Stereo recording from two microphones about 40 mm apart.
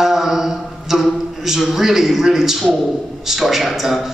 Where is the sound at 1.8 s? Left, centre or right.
Centre.